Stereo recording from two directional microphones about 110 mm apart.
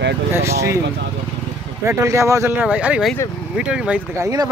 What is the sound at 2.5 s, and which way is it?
Speech, 15° right (ahead or behind).